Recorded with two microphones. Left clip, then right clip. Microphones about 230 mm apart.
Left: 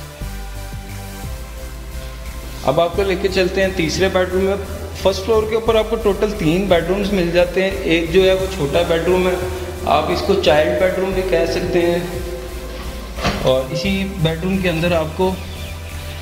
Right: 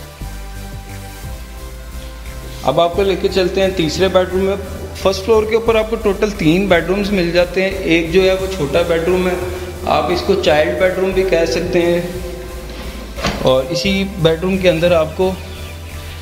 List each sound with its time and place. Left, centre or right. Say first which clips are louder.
2.6 s a man's voice: right 2 dB; centre
13.4 s a man's voice: right 4 dB; right